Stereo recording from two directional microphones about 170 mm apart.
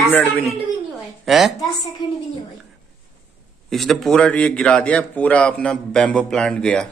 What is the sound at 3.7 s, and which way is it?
A man's voice, centre (ahead or behind).